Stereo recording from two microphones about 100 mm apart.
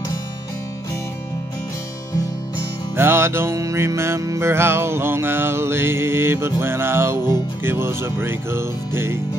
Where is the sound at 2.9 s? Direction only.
25° right (ahead or behind).